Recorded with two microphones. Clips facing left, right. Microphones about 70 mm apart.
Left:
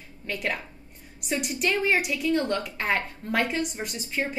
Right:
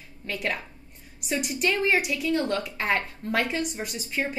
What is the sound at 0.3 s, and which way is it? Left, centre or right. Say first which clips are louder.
A woman's voice: even; centre.